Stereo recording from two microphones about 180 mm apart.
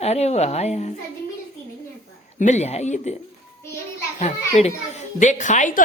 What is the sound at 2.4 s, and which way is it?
Speech, 40° left (ahead or behind).